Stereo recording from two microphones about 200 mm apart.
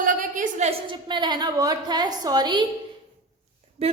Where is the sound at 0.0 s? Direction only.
40° right (ahead or behind); by 2.6 s 20° right (ahead or behind).